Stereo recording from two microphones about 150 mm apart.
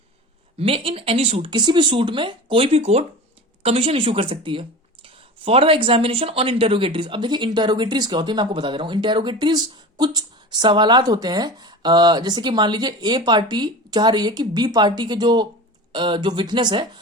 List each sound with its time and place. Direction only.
0.6 s speech: 40° right (ahead or behind)